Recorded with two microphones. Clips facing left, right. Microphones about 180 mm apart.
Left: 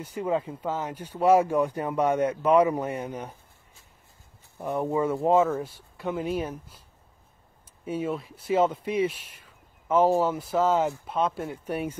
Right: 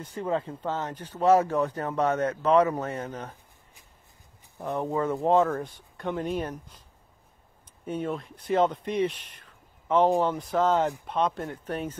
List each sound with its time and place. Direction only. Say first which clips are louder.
0.0 s speech: left 2 dB; 10° left (ahead or behind)
4.6 s speech: left 2 dB; 15° left (ahead or behind)
5.2 s speech: even; 5° left (ahead or behind)
7.8 s speech: left 1 dB; 5° left (ahead or behind)